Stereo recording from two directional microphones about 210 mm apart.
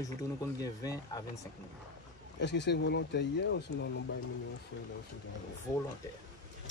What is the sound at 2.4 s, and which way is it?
Speech, 55° left (ahead or behind).